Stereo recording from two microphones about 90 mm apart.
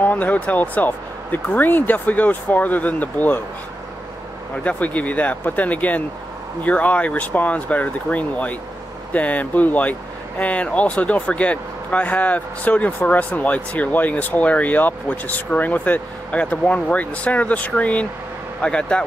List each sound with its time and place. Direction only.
0.0 s speech: 20° left (ahead or behind)
4.6 s speech: 15° left (ahead or behind)